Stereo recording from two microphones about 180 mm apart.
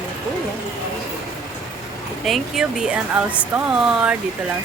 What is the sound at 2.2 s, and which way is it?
Speech, centre (ahead or behind).